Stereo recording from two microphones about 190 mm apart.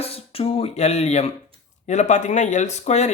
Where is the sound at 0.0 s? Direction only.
30° left (ahead or behind).